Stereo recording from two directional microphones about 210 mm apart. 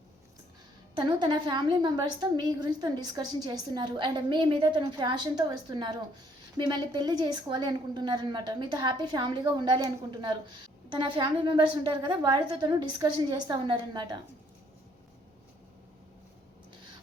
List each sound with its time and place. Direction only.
0.9 s a woman's voice: 20° right (ahead or behind)